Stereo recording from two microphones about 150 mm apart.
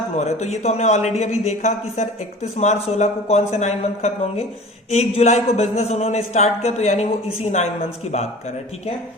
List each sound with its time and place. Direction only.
0.2 s speech: 50° left (ahead or behind)